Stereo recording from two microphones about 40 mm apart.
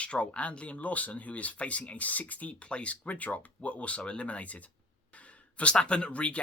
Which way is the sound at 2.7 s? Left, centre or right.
Left.